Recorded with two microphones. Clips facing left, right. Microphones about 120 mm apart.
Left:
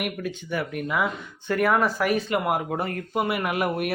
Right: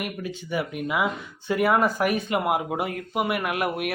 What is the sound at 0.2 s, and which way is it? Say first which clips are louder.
Speech: even; 5° right (ahead or behind).